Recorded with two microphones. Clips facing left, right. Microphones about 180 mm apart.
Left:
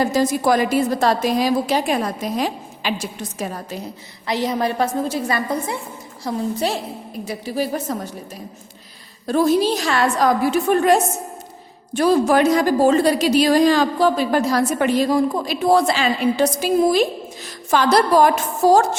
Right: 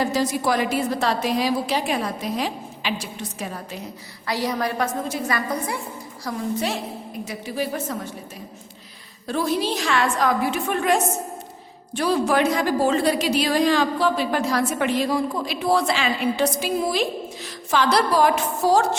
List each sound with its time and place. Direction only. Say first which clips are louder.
0.0 s a woman's voice: left 4 dB; 45° left (ahead or behind)
4.3 s a woman's voice: left 3 dB; 20° left (ahead or behind)
9.2 s a woman's voice: left 7 dB; 45° left (ahead or behind)